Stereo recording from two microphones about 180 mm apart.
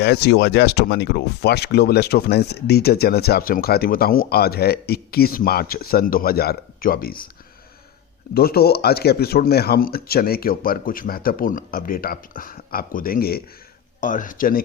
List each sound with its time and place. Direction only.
0.0 s speech: 70° left (ahead or behind)
8.3 s speech: 60° left (ahead or behind)